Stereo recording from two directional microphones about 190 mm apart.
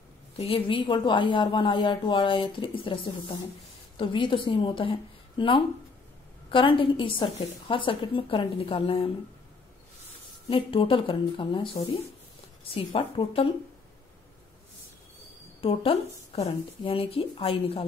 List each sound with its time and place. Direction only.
0.4 s a woman's voice: 30° left (ahead or behind)
10.5 s a woman's voice: 25° left (ahead or behind)
12.7 s a woman's voice: 30° left (ahead or behind)
15.6 s a woman's voice: 30° left (ahead or behind)